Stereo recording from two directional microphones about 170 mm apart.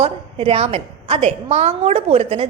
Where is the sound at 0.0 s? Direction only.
35° right (ahead or behind).